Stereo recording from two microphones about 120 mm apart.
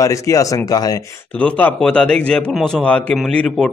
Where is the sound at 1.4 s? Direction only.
10° left (ahead or behind).